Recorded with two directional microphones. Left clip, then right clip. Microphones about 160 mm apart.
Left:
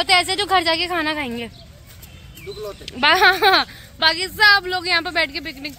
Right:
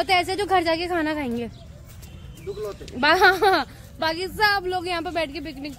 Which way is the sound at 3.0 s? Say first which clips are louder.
Left 3 dB; 10° right (ahead or behind).